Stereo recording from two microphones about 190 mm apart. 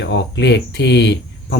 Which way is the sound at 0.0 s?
65° left (ahead or behind).